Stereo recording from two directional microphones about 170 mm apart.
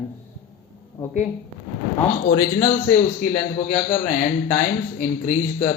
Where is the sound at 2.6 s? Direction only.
55° left (ahead or behind).